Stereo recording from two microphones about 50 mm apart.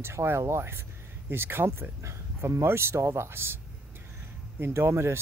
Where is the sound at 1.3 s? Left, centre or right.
Right.